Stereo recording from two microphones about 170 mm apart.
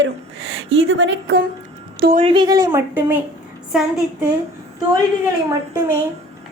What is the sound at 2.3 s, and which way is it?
Speech, 25° right (ahead or behind).